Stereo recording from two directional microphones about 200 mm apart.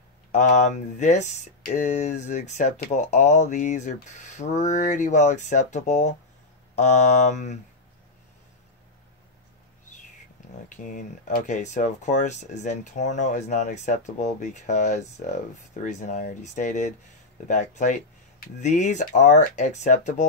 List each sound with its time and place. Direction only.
0.3 s speech: 35° left (ahead or behind)
10.8 s speech: 40° left (ahead or behind)